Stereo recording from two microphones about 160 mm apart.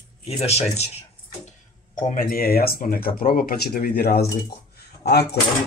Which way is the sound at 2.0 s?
55° left (ahead or behind).